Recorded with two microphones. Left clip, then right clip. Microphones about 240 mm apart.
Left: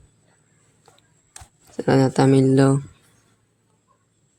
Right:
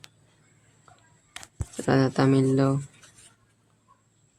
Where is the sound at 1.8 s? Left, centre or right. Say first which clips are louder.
Left 5 dB; centre.